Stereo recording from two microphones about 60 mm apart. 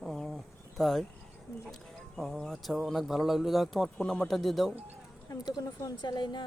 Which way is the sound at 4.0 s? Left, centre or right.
Centre.